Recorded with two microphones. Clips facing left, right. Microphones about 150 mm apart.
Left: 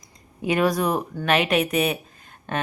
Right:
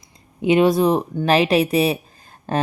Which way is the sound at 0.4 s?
25° right (ahead or behind).